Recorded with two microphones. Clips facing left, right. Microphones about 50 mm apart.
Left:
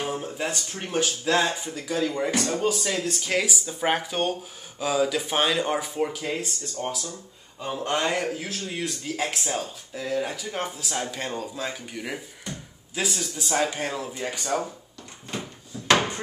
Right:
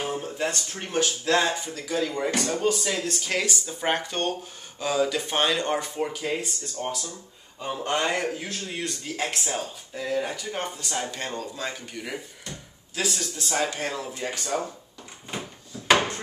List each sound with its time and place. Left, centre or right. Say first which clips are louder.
0.0 s speech: right 1 dB; centre
15.3 s drawer open or close: left 1 dB; centre